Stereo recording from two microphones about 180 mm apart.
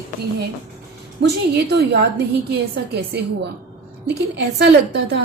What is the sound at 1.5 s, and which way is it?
Speech, 65° right (ahead or behind).